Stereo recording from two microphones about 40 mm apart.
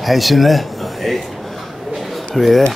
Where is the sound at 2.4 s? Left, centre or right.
Centre.